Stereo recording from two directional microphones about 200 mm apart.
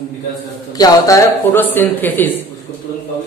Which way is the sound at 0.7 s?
20° left (ahead or behind).